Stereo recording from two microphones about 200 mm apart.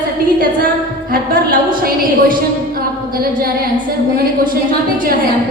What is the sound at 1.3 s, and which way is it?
A woman's voice, 50° right (ahead or behind).